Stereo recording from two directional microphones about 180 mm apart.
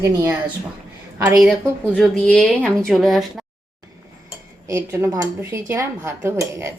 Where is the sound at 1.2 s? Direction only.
Centre (ahead or behind).